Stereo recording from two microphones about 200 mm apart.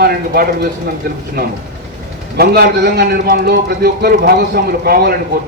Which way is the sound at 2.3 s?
50° right (ahead or behind).